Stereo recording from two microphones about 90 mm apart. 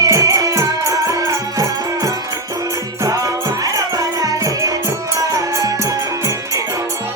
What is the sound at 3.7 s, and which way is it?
Music, 40° right (ahead or behind).